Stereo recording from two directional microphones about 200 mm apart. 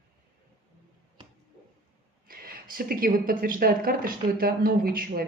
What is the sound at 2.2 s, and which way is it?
Speech, 45° right (ahead or behind).